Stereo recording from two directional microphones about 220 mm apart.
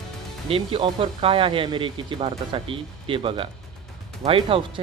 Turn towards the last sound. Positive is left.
turn(degrees=-25)  # may be behind; listen again after turning